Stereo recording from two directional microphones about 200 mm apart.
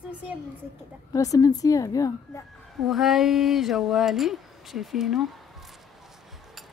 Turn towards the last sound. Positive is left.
turn(degrees=0)  # may be behind; listen again after turning